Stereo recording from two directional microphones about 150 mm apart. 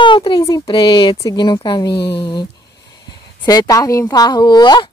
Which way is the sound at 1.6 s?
30° left (ahead or behind).